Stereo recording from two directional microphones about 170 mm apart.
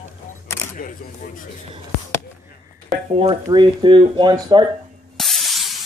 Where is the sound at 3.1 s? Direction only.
35° right (ahead or behind).